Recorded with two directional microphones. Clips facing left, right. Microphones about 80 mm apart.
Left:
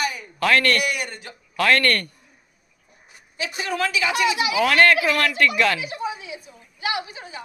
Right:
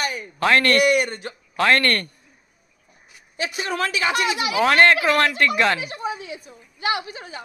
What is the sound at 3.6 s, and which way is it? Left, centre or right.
Speech, right.